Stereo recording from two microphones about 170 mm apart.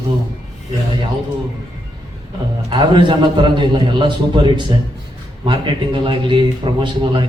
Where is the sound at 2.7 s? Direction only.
25° right (ahead or behind).